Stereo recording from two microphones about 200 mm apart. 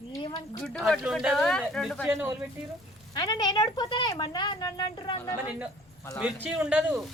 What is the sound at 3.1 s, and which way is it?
A woman's voice, 20° left (ahead or behind).